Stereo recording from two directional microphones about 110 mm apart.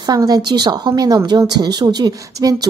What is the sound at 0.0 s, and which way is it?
Speech, 35° right (ahead or behind).